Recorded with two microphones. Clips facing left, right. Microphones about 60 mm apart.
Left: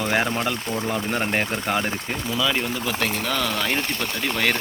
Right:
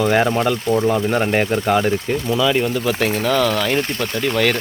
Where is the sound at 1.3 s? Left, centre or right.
Centre.